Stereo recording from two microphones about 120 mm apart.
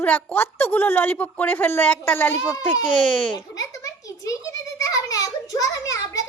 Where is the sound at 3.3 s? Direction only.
30° left (ahead or behind).